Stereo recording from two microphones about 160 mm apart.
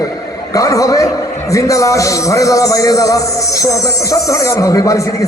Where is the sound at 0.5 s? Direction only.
20° left (ahead or behind).